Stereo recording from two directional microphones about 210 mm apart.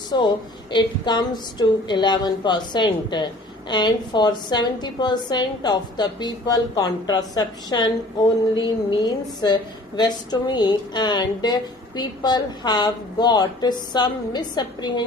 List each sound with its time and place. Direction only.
0.1 s a woman's voice: 20° left (ahead or behind)